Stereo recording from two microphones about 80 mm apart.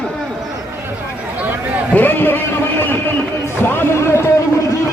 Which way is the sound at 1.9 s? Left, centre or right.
Left.